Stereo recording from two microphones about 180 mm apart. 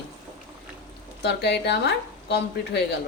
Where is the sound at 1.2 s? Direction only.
70° left (ahead or behind).